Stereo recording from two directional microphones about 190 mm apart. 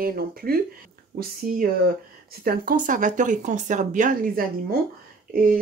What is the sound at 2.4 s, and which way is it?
Speech, 50° right (ahead or behind).